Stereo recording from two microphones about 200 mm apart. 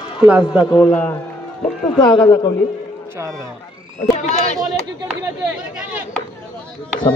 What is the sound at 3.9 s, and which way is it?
Speech, 35° left (ahead or behind).